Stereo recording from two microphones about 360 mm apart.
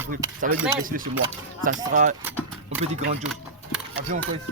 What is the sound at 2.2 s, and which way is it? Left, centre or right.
Vehicle, centre.